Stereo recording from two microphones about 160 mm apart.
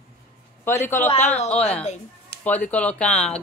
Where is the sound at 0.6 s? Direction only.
15° left (ahead or behind).